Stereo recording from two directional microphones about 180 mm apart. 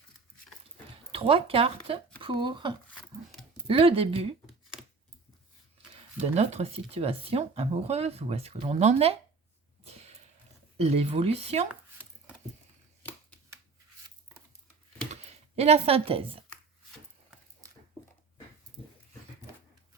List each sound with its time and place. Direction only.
1.1 s speech: 30° right (ahead or behind)
4.4 s a sound: 5° right (ahead or behind)
6.1 s speech: 40° right (ahead or behind)
9.8 s a sound: 35° right (ahead or behind)
10.8 s speech: 35° right (ahead or behind)
15.1 s computer keyboard: 35° right (ahead or behind)
18.8 s dog: 5° left (ahead or behind)